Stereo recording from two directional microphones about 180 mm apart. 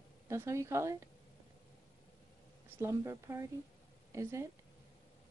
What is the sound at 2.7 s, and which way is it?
Speech, 15° right (ahead or behind).